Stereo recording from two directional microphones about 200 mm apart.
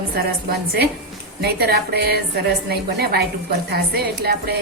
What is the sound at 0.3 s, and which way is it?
A woman's voice, 50° right (ahead or behind).